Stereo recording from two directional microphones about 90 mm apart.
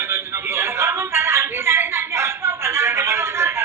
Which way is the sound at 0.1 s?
30° right (ahead or behind).